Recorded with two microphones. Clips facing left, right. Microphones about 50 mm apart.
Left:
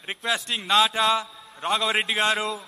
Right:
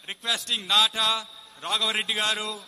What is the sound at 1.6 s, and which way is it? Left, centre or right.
Speech, left.